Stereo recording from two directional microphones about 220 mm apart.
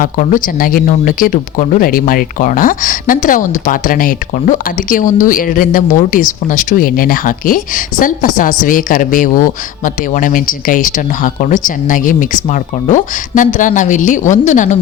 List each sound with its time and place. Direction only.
0.0 s speech: 35° left (ahead or behind)